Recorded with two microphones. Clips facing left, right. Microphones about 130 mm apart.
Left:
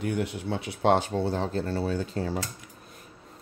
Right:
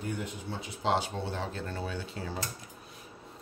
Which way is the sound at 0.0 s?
75° left (ahead or behind).